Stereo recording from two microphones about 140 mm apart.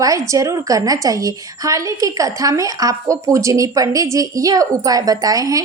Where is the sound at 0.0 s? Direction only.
25° right (ahead or behind).